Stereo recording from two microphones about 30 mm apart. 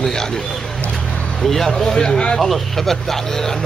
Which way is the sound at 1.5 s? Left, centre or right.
Centre.